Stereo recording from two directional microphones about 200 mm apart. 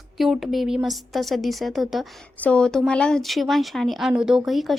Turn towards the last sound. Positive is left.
turn(degrees=0)  # may be behind; listen again after turning